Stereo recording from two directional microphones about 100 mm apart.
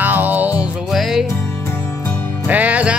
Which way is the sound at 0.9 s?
Centre (ahead or behind).